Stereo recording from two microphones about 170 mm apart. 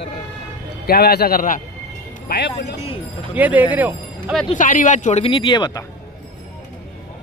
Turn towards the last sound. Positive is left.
turn(degrees=25)  # may be behind; listen again after turning